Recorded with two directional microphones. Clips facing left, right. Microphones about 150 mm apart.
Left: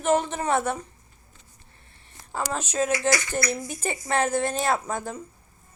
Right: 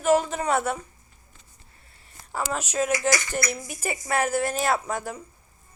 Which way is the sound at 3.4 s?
20° right (ahead or behind).